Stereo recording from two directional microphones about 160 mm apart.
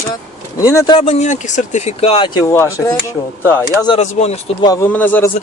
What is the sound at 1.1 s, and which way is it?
Speech, 45° left (ahead or behind).